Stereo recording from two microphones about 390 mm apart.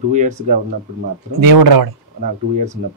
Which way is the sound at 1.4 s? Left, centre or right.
Right.